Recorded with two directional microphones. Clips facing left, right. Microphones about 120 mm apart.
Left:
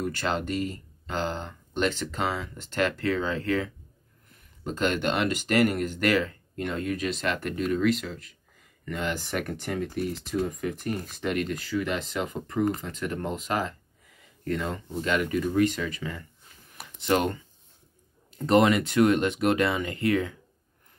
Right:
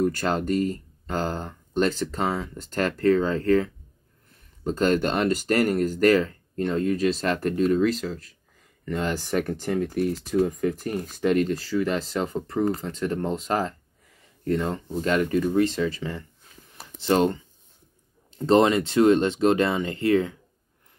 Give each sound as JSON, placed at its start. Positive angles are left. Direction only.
{"t": 0.0, "sound": "speech", "side_deg": -40}
{"t": 9.9, "sound": "speech", "side_deg": -45}
{"t": 16.7, "sound": "a sound", "side_deg": -30}
{"t": 18.3, "sound": "speech", "side_deg": -30}